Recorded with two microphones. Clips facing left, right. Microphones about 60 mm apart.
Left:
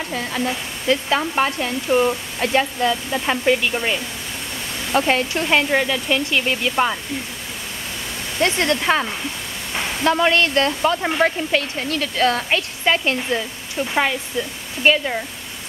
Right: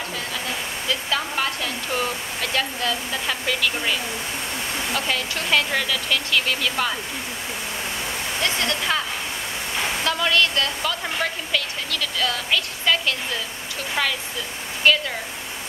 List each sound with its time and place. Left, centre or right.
0.8 s speech: left
4.9 s speech: left
8.4 s speech: left
10.0 s speech: left